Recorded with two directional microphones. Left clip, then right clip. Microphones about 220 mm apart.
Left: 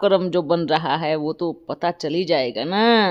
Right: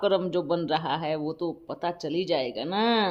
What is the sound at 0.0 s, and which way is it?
Speech, 30° left (ahead or behind).